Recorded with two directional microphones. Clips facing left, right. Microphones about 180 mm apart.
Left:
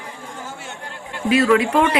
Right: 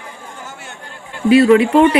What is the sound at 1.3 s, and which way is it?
Speech, 30° right (ahead or behind).